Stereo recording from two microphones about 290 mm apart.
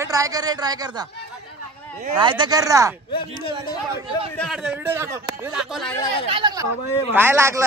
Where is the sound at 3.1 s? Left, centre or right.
Centre.